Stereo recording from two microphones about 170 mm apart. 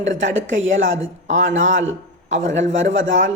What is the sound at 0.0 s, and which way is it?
Speech, 90° right.